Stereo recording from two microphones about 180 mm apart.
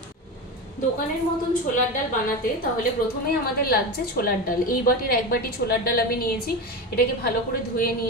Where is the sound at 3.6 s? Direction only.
55° left (ahead or behind).